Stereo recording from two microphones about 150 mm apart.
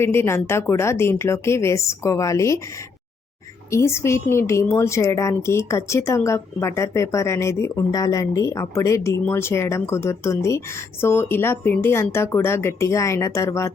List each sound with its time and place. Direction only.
0.0 s speech: 15° left (ahead or behind)
3.7 s a woman's voice: 20° left (ahead or behind)